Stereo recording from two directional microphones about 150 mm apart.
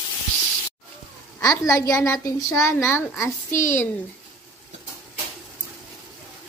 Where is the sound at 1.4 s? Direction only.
25° left (ahead or behind).